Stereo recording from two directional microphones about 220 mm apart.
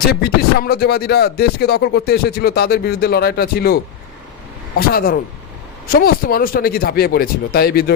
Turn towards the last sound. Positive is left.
turn(degrees=45)  # may be behind; listen again after turning